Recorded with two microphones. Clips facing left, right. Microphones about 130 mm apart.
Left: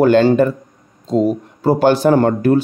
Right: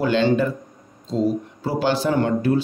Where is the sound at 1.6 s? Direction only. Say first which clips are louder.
Left 9 dB; 50° left (ahead or behind).